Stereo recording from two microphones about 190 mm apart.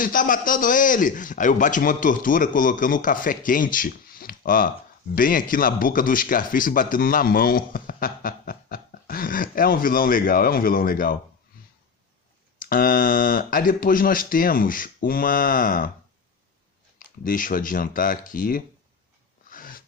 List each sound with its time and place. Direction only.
0.0 s speech: 45° left (ahead or behind)
12.5 s speech: 50° left (ahead or behind)
17.0 s speech: 45° left (ahead or behind)
19.5 s snort: 45° left (ahead or behind)